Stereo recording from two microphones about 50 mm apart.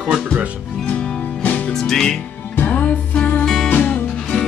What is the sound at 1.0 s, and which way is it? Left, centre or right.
Music, centre.